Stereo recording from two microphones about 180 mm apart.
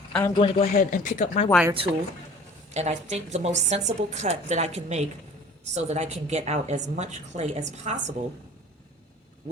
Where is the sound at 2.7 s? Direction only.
40° right (ahead or behind).